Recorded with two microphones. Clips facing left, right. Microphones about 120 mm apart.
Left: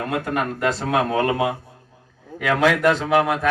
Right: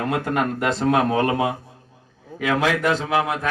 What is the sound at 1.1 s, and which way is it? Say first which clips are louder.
Speech: even; 25° right (ahead or behind).